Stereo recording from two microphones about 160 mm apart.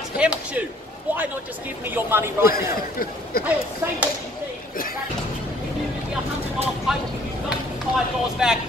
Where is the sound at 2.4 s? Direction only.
70° left (ahead or behind).